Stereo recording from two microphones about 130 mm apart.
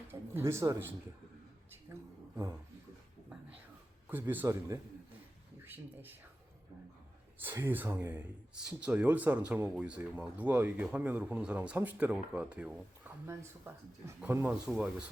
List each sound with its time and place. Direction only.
0.1 s speech: 20° right (ahead or behind)
1.9 s a sound: 20° right (ahead or behind)
4.3 s speech: 20° right (ahead or behind)
7.3 s speech: 15° right (ahead or behind)
14.7 s speech: 5° right (ahead or behind)